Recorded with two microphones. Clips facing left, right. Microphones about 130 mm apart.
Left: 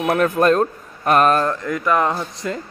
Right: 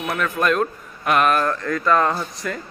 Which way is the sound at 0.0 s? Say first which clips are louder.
Left 6 dB; 40° left (ahead or behind).